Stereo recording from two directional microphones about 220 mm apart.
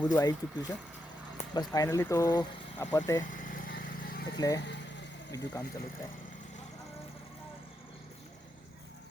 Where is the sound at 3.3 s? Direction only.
40° left (ahead or behind).